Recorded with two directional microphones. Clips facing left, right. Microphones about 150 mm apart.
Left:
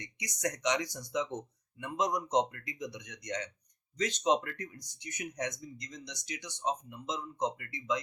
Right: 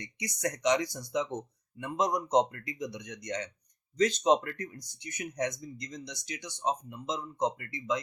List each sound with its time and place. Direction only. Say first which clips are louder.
0.0 s speech: right 2 dB; 30° right (ahead or behind)